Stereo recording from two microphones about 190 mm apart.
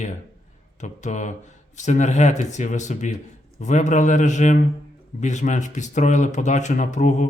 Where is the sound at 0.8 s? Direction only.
40° left (ahead or behind).